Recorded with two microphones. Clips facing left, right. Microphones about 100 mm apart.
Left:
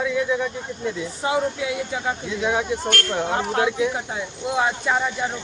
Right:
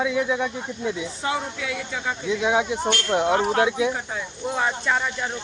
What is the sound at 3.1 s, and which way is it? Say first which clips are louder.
Speech: right 7 dB; 15° right (ahead or behind).